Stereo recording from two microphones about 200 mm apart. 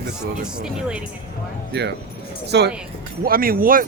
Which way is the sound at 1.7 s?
60° right (ahead or behind).